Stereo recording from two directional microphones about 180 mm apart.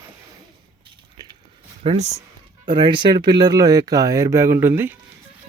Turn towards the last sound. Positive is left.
turn(degrees=-10)  # may be behind; listen again after turning